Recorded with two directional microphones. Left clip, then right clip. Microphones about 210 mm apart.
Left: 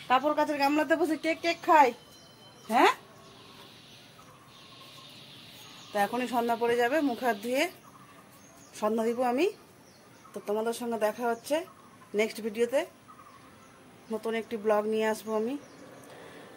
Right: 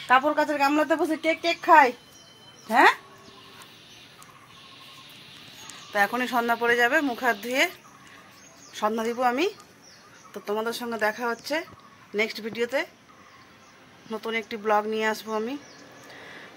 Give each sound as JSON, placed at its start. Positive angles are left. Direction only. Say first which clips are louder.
{"t": 0.1, "sound": "a woman's voice", "louder": "right 5 dB", "side_deg": -20}
{"t": 5.9, "sound": "speech", "louder": "right 5 dB", "side_deg": 0}
{"t": 8.7, "sound": "speech", "louder": "right 2 dB", "side_deg": 0}
{"t": 14.1, "sound": "speech", "louder": "right 2 dB", "side_deg": 0}